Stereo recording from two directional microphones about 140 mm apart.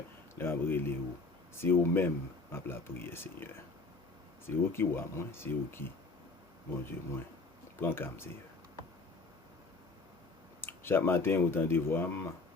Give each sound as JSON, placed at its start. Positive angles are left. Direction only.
{"t": 0.3, "sound": "speech", "side_deg": 15}
{"t": 7.8, "sound": "speech", "side_deg": 15}
{"t": 10.6, "sound": "speech", "side_deg": 15}